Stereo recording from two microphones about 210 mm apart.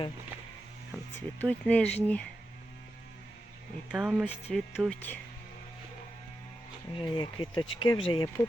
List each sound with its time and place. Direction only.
1.1 s speech: 5° left (ahead or behind)
3.9 s speech: 5° right (ahead or behind)
6.9 s speech: 20° left (ahead or behind)